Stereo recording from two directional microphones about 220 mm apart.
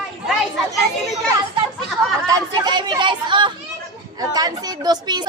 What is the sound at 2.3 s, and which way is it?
Chatter, 20° right (ahead or behind).